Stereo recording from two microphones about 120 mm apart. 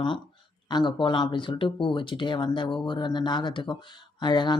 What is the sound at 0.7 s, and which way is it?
Speech, 40° left (ahead or behind).